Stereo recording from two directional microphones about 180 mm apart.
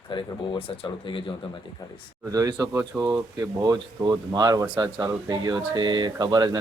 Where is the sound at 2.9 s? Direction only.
5° right (ahead or behind).